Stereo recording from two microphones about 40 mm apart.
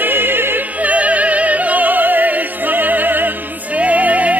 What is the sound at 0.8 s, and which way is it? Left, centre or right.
Music, right.